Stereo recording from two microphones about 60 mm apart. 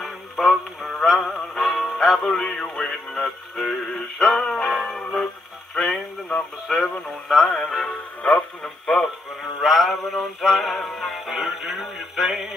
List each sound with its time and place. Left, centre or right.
0.0 s synthetic singing: centre
1.6 s music: centre
2.3 s synthetic singing: centre
4.6 s music: centre
5.8 s radio: centre
7.0 s music: centre
7.4 s synthetic singing: centre
7.8 s speech: centre
8.9 s music: centre